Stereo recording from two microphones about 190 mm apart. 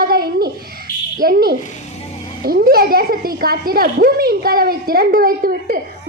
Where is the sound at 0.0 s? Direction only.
55° right (ahead or behind).